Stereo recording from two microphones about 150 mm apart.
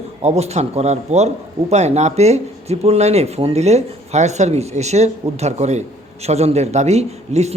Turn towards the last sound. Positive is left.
turn(degrees=-45)  # may be behind; listen again after turning